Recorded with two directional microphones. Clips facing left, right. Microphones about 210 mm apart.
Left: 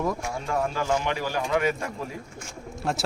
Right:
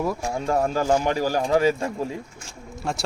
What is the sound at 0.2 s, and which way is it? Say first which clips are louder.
Speech: right 5 dB; 35° right (ahead or behind).